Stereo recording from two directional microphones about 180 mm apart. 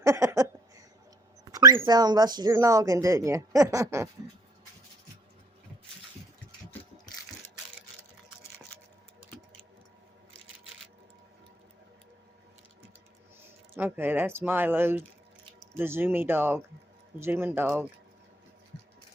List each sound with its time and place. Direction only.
0.0 s a sound: 15° right (ahead or behind)
1.5 s speech: 20° right (ahead or behind)
13.7 s speech: 10° right (ahead or behind)